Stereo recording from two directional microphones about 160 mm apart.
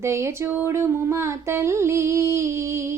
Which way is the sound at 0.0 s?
15° right (ahead or behind).